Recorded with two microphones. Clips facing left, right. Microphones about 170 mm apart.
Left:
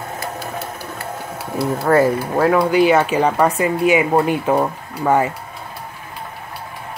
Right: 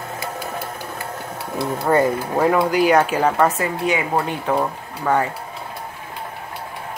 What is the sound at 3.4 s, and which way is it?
Speech, 15° left (ahead or behind).